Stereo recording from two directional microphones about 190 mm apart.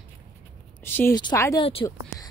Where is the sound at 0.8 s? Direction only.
10° left (ahead or behind).